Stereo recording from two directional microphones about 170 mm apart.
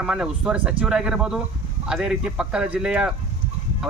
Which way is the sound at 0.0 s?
5° right (ahead or behind).